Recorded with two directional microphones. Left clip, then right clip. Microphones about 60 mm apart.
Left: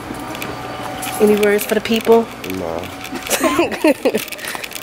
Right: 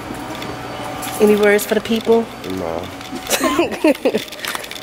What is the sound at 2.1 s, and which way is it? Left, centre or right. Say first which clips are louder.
Speech: left 3 dB; centre.